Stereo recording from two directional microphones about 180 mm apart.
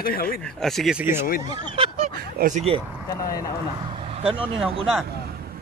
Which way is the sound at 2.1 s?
55° right (ahead or behind).